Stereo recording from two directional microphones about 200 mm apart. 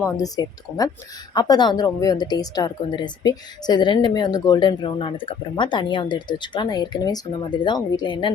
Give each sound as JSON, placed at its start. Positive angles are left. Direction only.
{"t": 0.0, "sound": "a woman's voice", "side_deg": 15}